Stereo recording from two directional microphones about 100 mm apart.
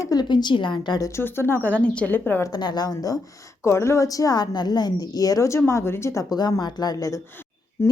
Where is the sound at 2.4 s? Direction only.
45° left (ahead or behind).